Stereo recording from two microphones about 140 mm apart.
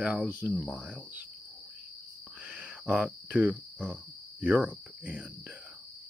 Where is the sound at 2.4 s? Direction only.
10° right (ahead or behind).